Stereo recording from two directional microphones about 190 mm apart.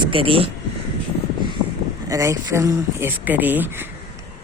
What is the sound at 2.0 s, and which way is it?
Speech, 15° right (ahead or behind).